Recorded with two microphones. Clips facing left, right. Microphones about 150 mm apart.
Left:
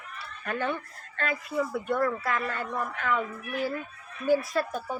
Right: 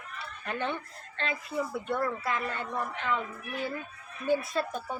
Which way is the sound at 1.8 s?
25° right (ahead or behind).